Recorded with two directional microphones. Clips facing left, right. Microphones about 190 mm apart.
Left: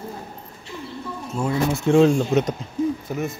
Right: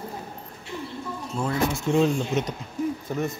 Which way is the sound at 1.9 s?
70° left (ahead or behind).